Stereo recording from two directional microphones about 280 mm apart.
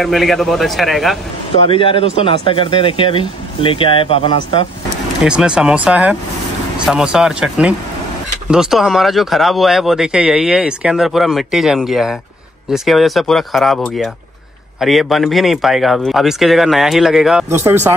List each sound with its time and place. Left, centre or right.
0.0 s speech: centre
1.6 s speech: centre
5.2 s speech: centre